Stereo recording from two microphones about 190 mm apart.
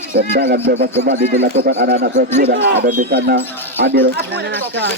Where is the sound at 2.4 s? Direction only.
60° right (ahead or behind).